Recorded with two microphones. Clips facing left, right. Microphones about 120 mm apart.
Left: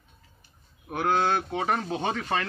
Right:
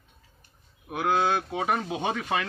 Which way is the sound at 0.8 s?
5° right (ahead or behind).